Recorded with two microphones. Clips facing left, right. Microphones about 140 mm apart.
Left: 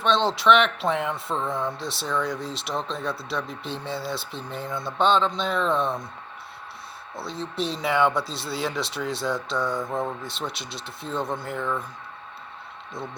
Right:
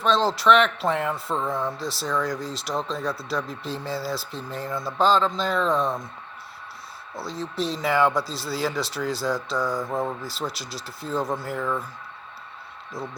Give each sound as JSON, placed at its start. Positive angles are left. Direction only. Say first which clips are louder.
{"t": 0.0, "sound": "speech", "louder": "right 1 dB", "side_deg": 0}
{"t": 7.2, "sound": "speech", "louder": "right 1 dB", "side_deg": 0}
{"t": 13.0, "sound": "speech", "louder": "right 1 dB", "side_deg": 0}